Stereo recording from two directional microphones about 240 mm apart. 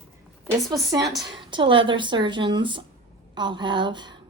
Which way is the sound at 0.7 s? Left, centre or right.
Centre.